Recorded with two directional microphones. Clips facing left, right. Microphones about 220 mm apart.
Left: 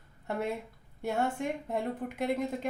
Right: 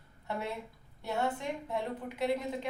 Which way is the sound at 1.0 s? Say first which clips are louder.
Left 3 dB; 50° left (ahead or behind).